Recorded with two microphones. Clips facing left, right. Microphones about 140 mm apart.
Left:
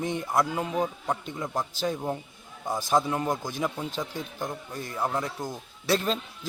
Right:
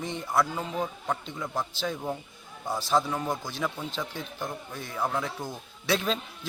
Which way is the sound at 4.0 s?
15° left (ahead or behind).